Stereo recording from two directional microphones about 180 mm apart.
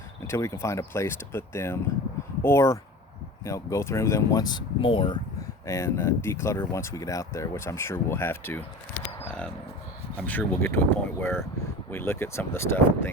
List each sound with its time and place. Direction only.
0.3 s speech: 15° left (ahead or behind)
5.6 s speech: 15° left (ahead or behind)
10.2 s speech: 10° left (ahead or behind)